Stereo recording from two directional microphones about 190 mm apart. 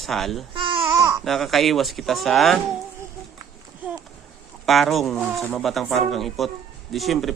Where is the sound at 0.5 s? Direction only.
30° right (ahead or behind).